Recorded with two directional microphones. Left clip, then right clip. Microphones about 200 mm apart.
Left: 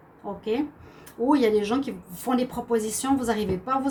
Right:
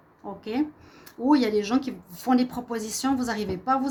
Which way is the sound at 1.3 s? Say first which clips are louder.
Left 1 dB; 50° right (ahead or behind).